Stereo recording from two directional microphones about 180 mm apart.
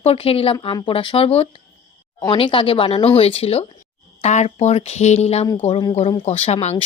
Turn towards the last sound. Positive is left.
turn(degrees=35)  # may be behind; listen again after turning